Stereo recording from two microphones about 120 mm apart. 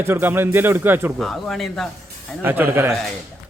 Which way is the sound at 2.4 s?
20° right (ahead or behind).